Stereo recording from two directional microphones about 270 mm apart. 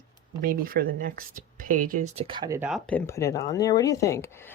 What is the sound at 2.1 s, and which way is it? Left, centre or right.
Speech, centre.